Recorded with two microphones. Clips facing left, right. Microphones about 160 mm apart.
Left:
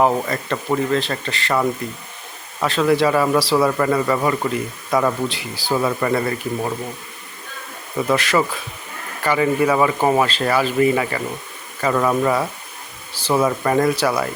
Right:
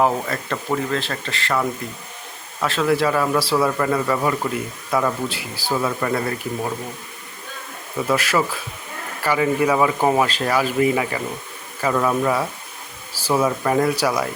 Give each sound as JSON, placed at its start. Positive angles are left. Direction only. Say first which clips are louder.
{"t": 0.0, "sound": "speech", "louder": "left 2 dB", "side_deg": 0}
{"t": 8.1, "sound": "speech", "louder": "left 2 dB", "side_deg": -5}